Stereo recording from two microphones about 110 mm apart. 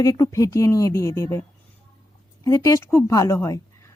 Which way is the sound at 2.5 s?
30° left (ahead or behind).